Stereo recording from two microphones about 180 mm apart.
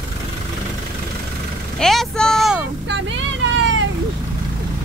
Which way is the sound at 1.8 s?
Centre (ahead or behind).